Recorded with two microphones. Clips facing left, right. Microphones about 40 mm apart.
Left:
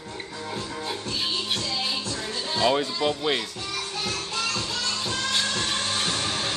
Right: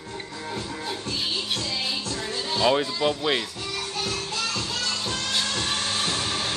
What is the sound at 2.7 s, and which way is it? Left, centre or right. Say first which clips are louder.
Speech: right 1 dB; centre.